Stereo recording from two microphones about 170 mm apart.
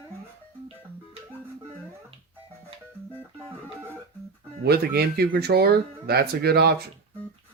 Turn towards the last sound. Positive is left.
turn(degrees=-70)  # may be behind; listen again after turning